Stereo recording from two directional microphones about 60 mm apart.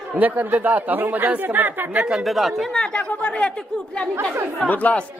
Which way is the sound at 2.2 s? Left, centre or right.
Centre.